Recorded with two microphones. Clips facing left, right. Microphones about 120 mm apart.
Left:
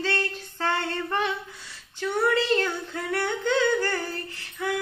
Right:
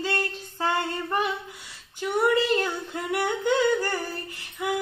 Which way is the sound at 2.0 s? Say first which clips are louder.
Right 1 dB; 15° right (ahead or behind).